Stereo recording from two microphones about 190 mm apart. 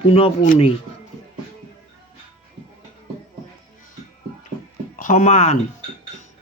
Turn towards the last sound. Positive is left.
turn(degrees=40)  # may be behind; listen again after turning